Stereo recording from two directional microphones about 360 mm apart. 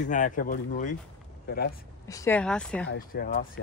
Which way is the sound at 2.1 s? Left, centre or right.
Centre.